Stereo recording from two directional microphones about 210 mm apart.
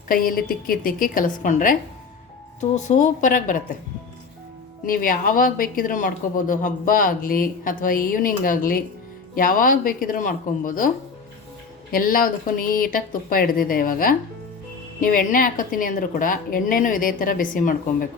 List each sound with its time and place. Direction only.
0.1 s speech: 40° left (ahead or behind)
4.9 s speech: 40° left (ahead or behind)